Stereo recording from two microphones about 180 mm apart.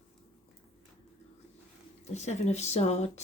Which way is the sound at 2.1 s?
40° left (ahead or behind).